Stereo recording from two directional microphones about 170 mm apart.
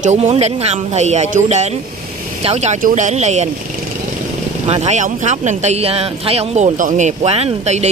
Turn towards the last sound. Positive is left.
turn(degrees=-40)  # may be behind; listen again after turning